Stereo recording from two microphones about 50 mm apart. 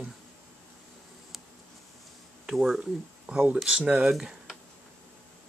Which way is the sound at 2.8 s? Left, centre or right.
Right.